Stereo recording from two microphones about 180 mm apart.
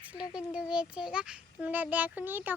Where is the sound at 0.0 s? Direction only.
5° right (ahead or behind).